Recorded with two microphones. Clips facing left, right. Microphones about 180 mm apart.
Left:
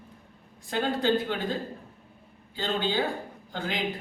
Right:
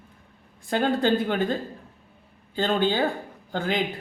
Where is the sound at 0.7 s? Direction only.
55° right (ahead or behind).